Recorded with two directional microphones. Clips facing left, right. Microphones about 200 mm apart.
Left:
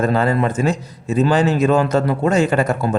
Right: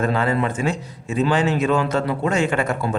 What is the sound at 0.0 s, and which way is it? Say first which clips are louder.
A man's voice: left 3 dB; 40° left (ahead or behind).